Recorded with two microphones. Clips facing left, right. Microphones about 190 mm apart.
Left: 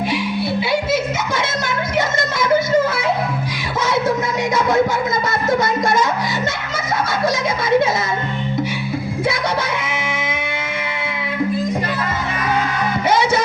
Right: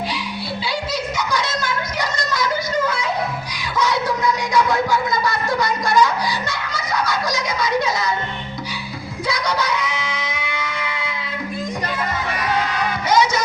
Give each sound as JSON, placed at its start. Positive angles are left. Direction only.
{"t": 0.7, "sound": "music", "side_deg": 25}
{"t": 6.7, "sound": "children playing", "side_deg": 25}
{"t": 9.2, "sound": "music", "side_deg": 25}
{"t": 13.1, "sound": "music", "side_deg": 25}